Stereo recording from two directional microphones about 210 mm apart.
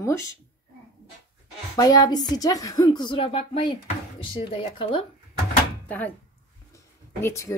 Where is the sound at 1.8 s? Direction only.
20° left (ahead or behind).